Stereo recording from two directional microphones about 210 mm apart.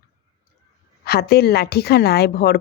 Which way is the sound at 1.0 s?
50° left (ahead or behind).